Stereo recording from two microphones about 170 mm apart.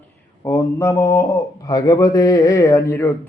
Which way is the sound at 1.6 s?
20° left (ahead or behind).